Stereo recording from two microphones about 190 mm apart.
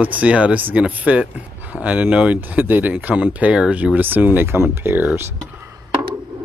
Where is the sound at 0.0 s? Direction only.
5° right (ahead or behind).